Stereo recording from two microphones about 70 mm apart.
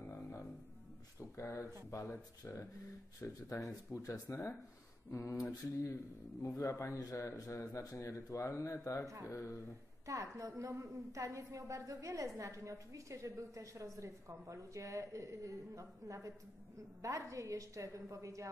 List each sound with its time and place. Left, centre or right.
0.1 s music: left
1.2 s speech: left
9.0 s a woman's voice: right
9.3 s speech: left
10.0 s a woman's voice: right